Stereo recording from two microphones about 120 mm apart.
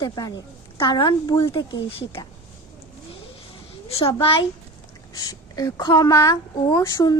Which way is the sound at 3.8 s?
55° left (ahead or behind).